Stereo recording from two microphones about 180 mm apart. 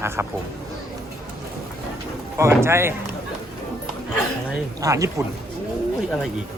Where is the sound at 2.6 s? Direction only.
15° right (ahead or behind).